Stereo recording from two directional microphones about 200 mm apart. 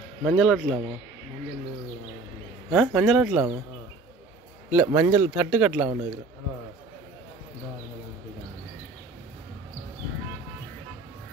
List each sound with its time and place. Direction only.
0.2 s speech: centre (ahead or behind)
2.7 s speech: 5° right (ahead or behind)
4.6 s speech: 10° right (ahead or behind)